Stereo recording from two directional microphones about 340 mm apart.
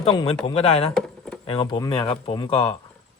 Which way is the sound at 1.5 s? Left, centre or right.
Centre.